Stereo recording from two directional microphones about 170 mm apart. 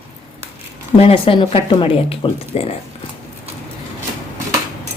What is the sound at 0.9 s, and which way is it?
Speech, 35° left (ahead or behind).